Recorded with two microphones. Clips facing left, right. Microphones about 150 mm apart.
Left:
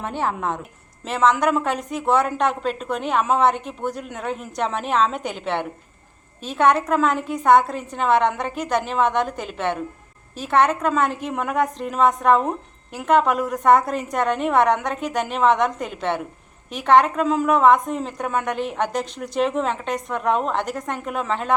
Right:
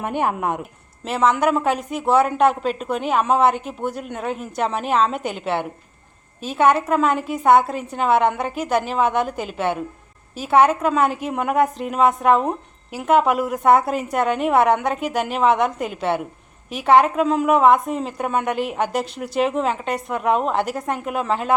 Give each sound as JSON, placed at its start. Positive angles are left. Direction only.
{"t": 0.0, "sound": "a woman's voice", "side_deg": -15}